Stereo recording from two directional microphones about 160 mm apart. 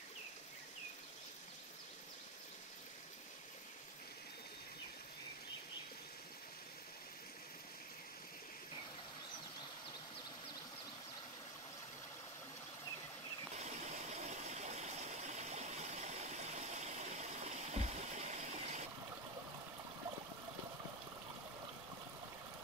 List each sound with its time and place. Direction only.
13.6 s stream: 45° right (ahead or behind)